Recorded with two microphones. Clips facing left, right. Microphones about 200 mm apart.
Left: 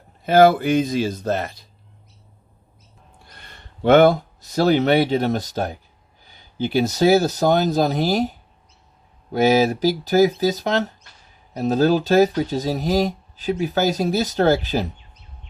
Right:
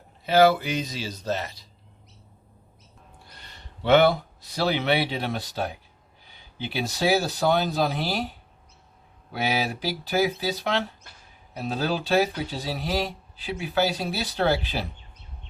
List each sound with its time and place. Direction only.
0.3 s speech: 50° left (ahead or behind)
3.3 s speech: 55° left (ahead or behind)